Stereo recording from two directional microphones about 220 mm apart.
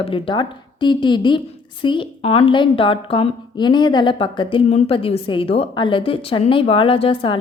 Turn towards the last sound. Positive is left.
turn(degrees=25)  # may be behind; listen again after turning